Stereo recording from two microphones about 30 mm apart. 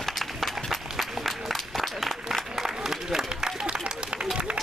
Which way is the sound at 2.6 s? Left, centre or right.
Centre.